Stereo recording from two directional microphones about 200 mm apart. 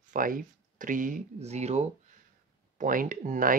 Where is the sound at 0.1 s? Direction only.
40° right (ahead or behind).